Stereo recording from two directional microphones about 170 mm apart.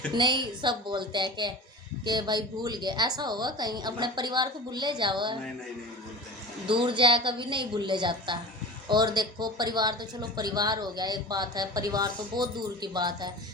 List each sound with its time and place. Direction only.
0.1 s speech: 25° right (ahead or behind)
6.7 s speech: 30° right (ahead or behind)